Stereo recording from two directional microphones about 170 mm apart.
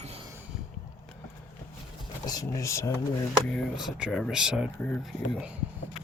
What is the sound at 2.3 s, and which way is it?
Speech, 20° left (ahead or behind).